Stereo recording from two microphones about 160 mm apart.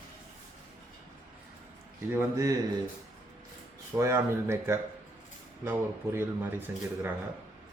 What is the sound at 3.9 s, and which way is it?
Speech, 15° right (ahead or behind).